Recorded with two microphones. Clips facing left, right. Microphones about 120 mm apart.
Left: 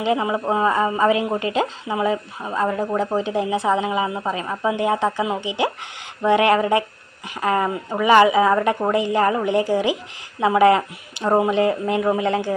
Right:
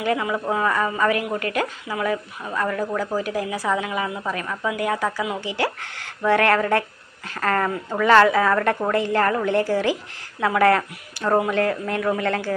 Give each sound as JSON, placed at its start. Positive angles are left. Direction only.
{"t": 0.0, "sound": "a woman's voice", "side_deg": 25}